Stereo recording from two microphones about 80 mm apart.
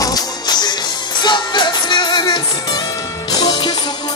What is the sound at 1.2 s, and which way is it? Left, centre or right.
Music, left.